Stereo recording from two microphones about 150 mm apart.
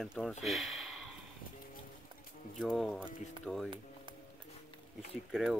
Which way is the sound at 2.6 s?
Centre (ahead or behind).